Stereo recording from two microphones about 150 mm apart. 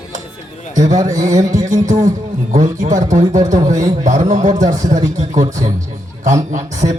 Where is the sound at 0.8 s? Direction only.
55° right (ahead or behind).